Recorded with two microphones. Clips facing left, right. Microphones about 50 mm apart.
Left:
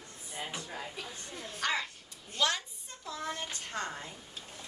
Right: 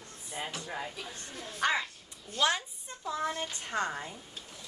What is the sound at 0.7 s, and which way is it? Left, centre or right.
A child's voice, centre.